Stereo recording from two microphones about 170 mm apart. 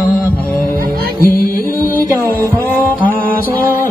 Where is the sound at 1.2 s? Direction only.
60° left (ahead or behind).